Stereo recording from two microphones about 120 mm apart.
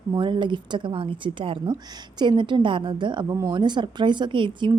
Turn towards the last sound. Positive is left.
turn(degrees=-40)  # may be behind; listen again after turning